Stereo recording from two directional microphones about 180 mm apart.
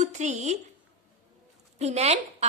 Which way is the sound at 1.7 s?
35° right (ahead or behind).